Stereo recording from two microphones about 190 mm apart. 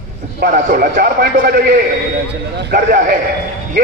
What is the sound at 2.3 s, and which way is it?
Speech, 60° right (ahead or behind).